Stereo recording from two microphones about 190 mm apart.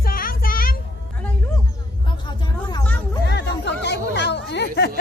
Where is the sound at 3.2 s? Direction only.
60° left (ahead or behind).